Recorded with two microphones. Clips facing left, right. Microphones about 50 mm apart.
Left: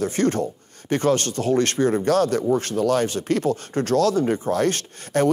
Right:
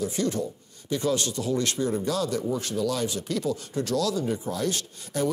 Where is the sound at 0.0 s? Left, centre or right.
Left.